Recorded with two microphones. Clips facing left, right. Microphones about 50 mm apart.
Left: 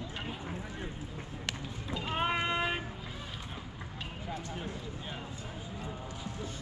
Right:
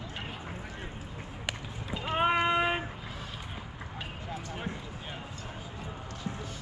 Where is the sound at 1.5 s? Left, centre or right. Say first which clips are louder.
Right 2 dB; centre.